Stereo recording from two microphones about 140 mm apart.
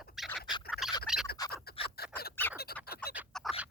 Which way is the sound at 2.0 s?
90° left.